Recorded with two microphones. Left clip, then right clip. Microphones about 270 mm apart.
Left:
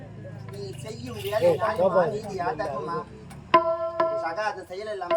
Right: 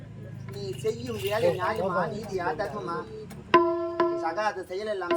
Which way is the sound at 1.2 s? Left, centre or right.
Centre.